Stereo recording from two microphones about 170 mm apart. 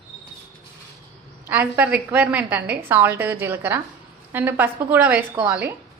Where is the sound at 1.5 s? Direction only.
10° right (ahead or behind).